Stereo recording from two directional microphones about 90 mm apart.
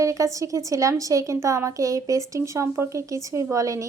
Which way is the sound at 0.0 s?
40° right (ahead or behind).